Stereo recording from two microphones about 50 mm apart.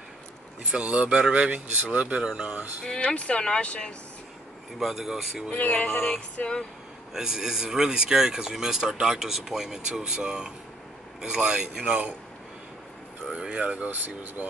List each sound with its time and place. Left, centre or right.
0.8 s speech: right
2.9 s speech: centre
4.7 s speech: centre
5.5 s speech: left
7.2 s speech: centre
13.5 s speech: right